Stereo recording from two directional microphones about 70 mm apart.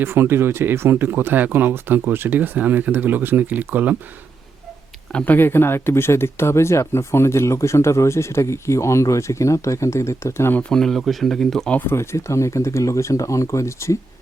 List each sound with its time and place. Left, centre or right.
0.0 s speech: right
5.2 s speech: left
10.6 s speech: centre
11.7 s speech: left
11.9 s speech: left